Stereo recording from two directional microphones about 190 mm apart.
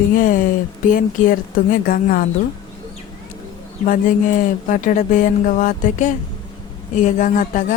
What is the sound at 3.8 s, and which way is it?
Speech, 45° left (ahead or behind).